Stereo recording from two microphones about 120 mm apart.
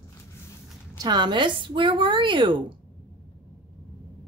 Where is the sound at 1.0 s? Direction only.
35° right (ahead or behind).